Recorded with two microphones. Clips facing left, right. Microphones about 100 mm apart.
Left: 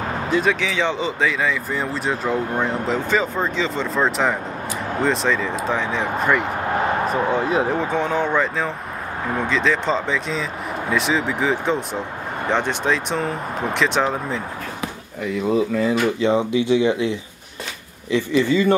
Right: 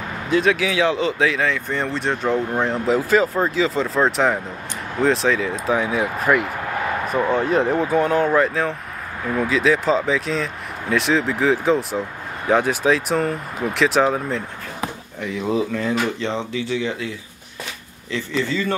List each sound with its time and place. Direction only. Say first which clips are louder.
0.3 s speech: right 3 dB; centre (ahead or behind); by 18.8 s 15° left (ahead or behind)